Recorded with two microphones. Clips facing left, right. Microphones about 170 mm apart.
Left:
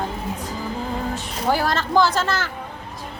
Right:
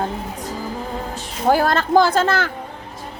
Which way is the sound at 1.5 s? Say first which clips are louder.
Right 5 dB; 50° right (ahead or behind).